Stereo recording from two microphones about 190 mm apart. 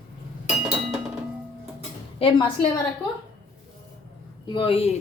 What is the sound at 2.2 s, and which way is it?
Speech, 30° left (ahead or behind).